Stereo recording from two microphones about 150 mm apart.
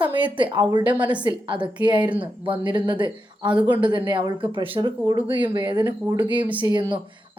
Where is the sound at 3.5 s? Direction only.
10° right (ahead or behind).